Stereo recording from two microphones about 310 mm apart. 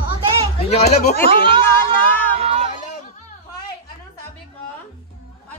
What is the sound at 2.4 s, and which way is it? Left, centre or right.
Chatter, centre.